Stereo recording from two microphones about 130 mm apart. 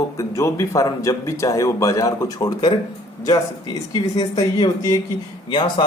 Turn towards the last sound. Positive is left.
turn(degrees=35)  # may be behind; listen again after turning